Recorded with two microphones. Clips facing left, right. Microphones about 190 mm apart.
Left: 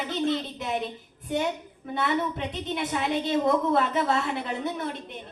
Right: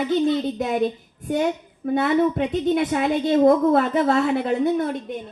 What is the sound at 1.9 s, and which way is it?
A woman's voice, 50° right (ahead or behind).